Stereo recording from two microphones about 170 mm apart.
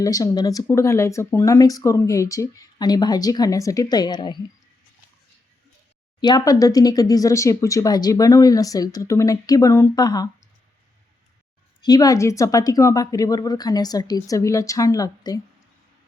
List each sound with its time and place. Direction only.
0.0 s speech: 20° left (ahead or behind)
6.1 s speech: 25° left (ahead or behind)
11.8 s speech: 20° left (ahead or behind)